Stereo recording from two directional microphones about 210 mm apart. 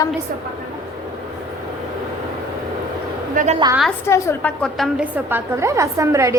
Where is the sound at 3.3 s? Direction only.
35° right (ahead or behind).